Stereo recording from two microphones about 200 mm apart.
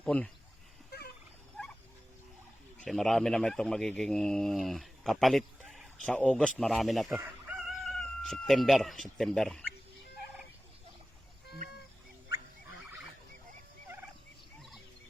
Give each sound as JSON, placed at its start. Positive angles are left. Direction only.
{"t": 0.0, "sound": "speech", "side_deg": 5}
{"t": 0.9, "sound": "turkey", "side_deg": 50}
{"t": 2.7, "sound": "speech", "side_deg": 5}